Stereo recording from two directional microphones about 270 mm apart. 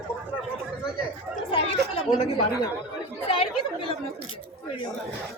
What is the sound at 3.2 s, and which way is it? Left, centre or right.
Speech, left.